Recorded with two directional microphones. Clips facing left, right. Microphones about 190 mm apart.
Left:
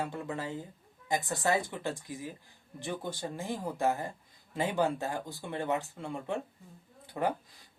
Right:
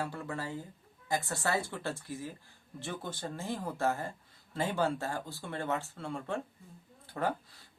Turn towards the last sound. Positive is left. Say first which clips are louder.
# left 2 dB
turn(degrees=15)  # may be behind; listen again after turning